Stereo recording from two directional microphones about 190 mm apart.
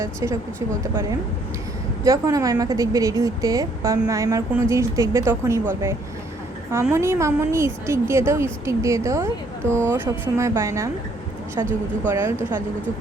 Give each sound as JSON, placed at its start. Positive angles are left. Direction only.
{"t": 0.0, "sound": "a woman's voice", "side_deg": -15}
{"t": 2.0, "sound": "a woman's voice", "side_deg": -15}